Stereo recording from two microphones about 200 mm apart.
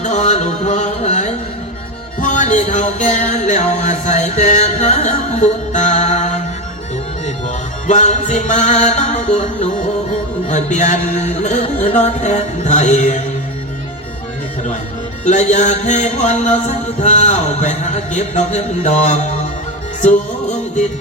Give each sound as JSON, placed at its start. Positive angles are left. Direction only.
{"t": 0.0, "sound": "a sound", "side_deg": 35}
{"t": 2.2, "sound": "music", "side_deg": 40}
{"t": 15.2, "sound": "music", "side_deg": 35}